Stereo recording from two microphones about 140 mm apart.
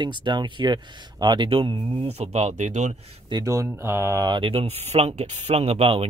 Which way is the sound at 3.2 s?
25° right (ahead or behind).